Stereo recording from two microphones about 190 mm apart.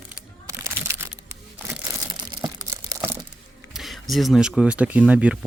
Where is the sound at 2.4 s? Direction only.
15° right (ahead or behind).